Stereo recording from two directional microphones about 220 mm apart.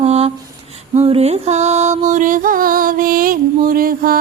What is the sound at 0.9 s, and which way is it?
Music, 25° right (ahead or behind).